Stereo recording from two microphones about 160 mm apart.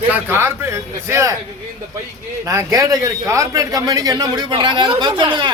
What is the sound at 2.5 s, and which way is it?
A man's voice, 20° right (ahead or behind).